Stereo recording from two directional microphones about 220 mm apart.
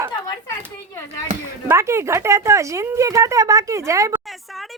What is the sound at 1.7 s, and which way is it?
A woman's voice, 10° right (ahead or behind).